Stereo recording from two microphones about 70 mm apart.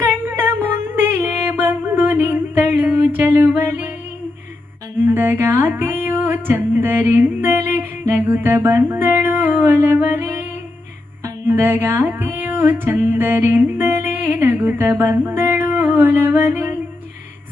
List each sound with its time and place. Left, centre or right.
0.3 s music: right
5.0 s music: right
11.4 s music: right